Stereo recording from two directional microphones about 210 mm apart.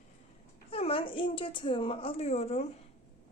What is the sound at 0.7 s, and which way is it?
Speech, 25° left (ahead or behind).